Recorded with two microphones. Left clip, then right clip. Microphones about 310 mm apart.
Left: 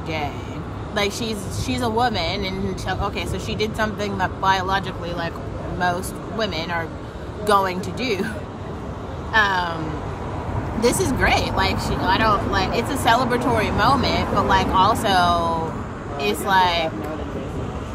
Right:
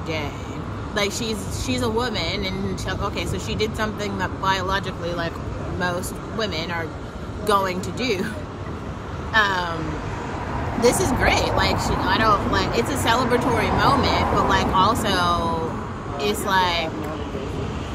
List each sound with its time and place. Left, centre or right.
0.9 s speech: centre
9.3 s speech: centre
10.8 s speech: centre